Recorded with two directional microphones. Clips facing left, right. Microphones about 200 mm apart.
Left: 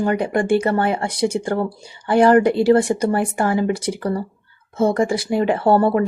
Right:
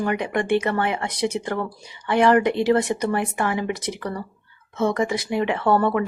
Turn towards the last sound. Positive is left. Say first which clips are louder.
# left 4 dB
turn(degrees=35)  # may be behind; listen again after turning